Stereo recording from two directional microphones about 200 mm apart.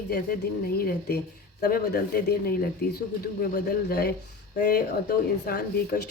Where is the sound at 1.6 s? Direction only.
50° left (ahead or behind).